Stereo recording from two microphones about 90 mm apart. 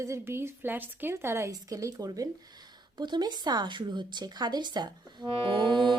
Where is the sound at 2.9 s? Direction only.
55° right (ahead or behind).